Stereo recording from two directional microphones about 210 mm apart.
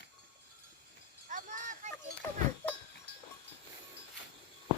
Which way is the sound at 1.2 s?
35° right (ahead or behind).